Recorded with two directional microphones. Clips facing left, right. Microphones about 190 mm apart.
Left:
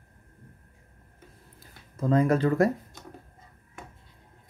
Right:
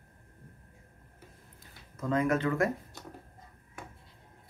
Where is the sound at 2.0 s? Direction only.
35° left (ahead or behind).